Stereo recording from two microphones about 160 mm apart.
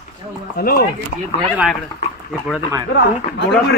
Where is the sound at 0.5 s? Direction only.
70° left (ahead or behind).